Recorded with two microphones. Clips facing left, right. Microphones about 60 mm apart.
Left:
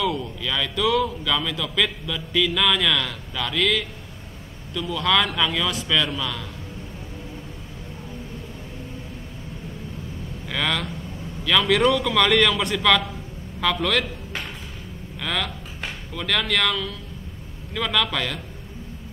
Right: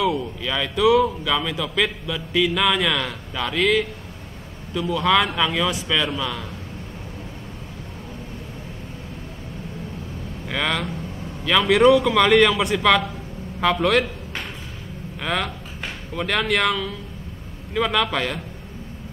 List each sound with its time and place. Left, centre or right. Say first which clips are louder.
0.0 s speech: right 3 dB; centre
4.9 s speech: right 2 dB; centre
10.5 s speech: right 1 dB; centre
15.1 s speech: right 2 dB; centre